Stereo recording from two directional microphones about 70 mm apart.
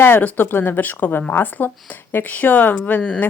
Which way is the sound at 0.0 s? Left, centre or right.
Left.